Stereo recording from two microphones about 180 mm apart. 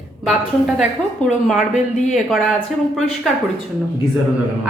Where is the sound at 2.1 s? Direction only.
Centre (ahead or behind).